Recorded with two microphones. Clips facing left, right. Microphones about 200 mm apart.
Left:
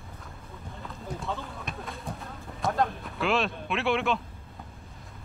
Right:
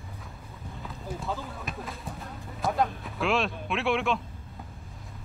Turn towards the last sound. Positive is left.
turn(degrees=0)  # may be behind; listen again after turning